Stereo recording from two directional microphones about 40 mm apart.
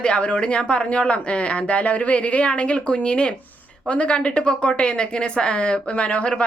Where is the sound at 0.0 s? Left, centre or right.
Left.